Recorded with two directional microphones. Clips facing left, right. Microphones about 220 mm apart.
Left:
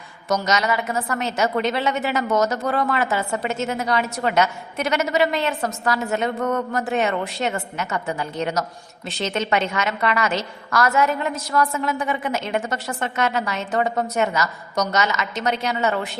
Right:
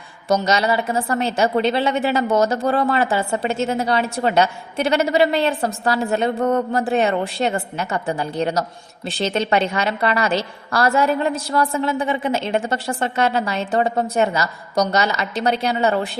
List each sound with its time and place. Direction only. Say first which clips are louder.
0.3 s a woman's voice: right 3 dB; 30° right (ahead or behind)